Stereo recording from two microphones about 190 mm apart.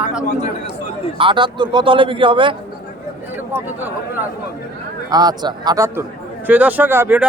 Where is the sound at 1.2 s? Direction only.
25° right (ahead or behind).